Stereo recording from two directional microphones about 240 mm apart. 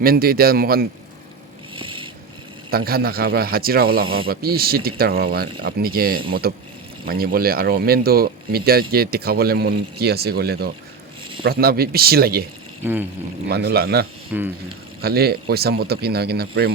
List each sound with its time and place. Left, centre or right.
0.0 s speech: right
1.7 s cat: right
2.6 s speech: right
12.8 s a sound: centre
13.5 s speech: right
14.3 s a sound: centre
15.0 s speech: right